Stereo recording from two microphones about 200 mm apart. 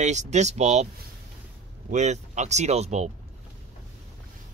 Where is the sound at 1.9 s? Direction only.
35° right (ahead or behind).